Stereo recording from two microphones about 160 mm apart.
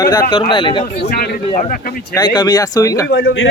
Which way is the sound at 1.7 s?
60° left (ahead or behind).